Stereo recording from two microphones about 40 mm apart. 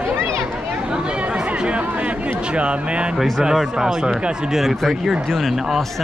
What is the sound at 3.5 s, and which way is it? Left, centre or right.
Speech, centre.